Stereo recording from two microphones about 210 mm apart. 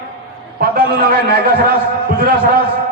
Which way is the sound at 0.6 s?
45° right (ahead or behind).